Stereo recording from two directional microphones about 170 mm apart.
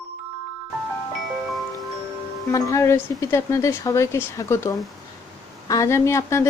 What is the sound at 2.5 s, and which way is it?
Speech, 20° left (ahead or behind).